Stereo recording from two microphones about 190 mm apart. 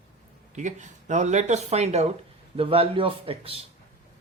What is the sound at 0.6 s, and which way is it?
Speech, 40° right (ahead or behind).